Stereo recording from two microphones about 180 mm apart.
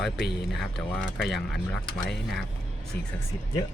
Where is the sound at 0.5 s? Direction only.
Centre (ahead or behind).